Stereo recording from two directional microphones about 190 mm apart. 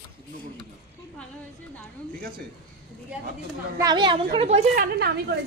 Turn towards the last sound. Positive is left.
turn(degrees=-55)  # may be behind; listen again after turning